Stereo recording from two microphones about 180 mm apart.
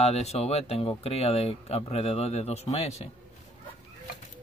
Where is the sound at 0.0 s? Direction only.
35° left (ahead or behind).